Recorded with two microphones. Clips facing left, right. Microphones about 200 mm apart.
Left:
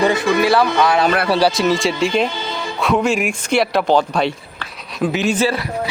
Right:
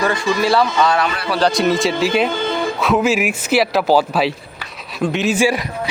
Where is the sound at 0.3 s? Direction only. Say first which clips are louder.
Left 2 dB; 60° left (ahead or behind).